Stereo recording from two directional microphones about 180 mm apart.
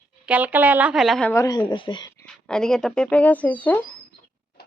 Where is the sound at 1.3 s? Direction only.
20° left (ahead or behind).